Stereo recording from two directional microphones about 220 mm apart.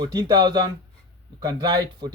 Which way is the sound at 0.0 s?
20° right (ahead or behind).